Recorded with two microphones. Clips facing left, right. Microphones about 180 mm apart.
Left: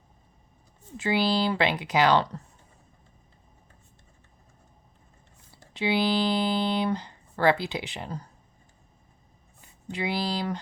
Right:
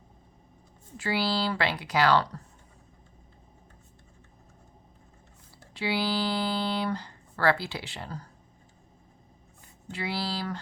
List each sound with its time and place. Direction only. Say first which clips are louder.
0.9 s speech: left 4 dB; 20° left (ahead or behind)
5.7 s speech: left 4 dB; 20° left (ahead or behind)
9.9 s speech: left 4 dB; 20° left (ahead or behind)